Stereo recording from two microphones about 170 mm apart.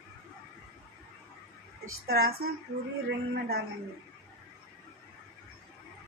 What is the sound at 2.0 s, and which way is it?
Speech, 65° right (ahead or behind).